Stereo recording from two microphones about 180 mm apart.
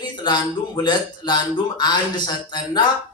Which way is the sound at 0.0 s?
25° left (ahead or behind).